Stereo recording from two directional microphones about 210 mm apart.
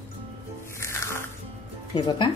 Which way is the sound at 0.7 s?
15° left (ahead or behind).